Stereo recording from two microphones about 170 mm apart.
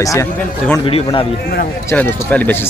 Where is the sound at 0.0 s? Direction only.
15° left (ahead or behind).